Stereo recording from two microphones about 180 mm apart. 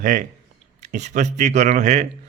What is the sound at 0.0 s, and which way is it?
A man's voice, 45° right (ahead or behind).